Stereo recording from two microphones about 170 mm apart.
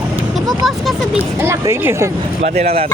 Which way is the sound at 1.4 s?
15° right (ahead or behind).